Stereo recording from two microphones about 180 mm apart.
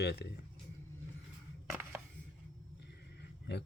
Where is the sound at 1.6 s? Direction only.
15° right (ahead or behind).